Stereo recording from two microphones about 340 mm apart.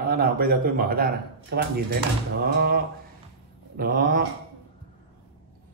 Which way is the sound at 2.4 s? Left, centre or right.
Right.